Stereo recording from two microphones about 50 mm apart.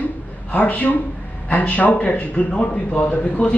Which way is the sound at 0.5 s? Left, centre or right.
Left.